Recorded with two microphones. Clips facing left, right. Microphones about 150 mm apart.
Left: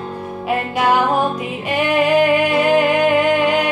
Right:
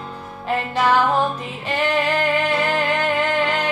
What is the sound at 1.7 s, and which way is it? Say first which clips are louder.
Music: left 5 dB; 10° left (ahead or behind).